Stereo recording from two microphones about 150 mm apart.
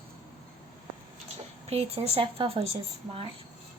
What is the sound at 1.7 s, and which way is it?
A woman's voice, 40° right (ahead or behind).